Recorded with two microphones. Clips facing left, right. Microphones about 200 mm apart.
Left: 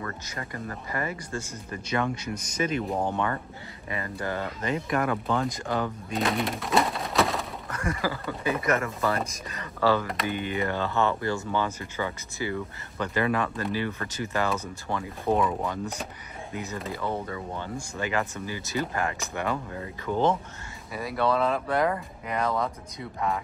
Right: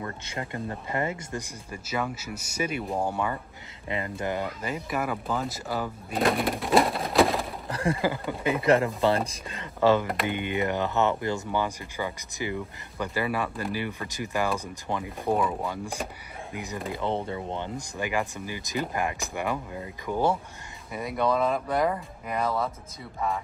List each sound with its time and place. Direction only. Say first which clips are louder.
0.0 s speech: right 2 dB; 20° right (ahead or behind)
1.7 s speech: left 3 dB; 5° right (ahead or behind)
3.9 s speech: right 2 dB; 20° right (ahead or behind); by 7.4 s centre (ahead or behind)
7.7 s a sound: right 4 dB; 30° right (ahead or behind)
8.0 s speech: right 2 dB; 20° right (ahead or behind)
8.6 s speech: right 7 dB; 30° right (ahead or behind)
15.2 s speech: left 1 dB; centre (ahead or behind)
20.9 s speech: right 1 dB; centre (ahead or behind)
21.2 s speech: even; 10° right (ahead or behind)